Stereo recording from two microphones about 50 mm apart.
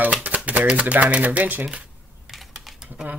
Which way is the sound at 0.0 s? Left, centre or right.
Right.